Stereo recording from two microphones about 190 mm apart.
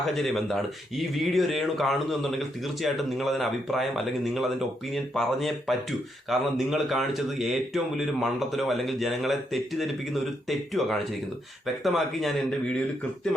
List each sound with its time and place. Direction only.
0.0 s speech: centre (ahead or behind)